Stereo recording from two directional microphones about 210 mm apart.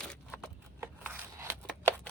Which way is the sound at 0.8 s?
10° right (ahead or behind).